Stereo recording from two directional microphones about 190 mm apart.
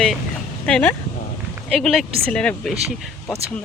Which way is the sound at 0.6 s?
5° left (ahead or behind).